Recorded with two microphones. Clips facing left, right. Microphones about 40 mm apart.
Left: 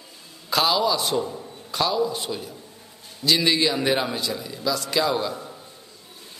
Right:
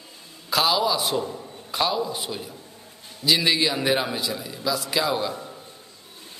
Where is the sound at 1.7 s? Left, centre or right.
Centre.